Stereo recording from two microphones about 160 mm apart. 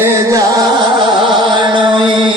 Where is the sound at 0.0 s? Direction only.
20° right (ahead or behind).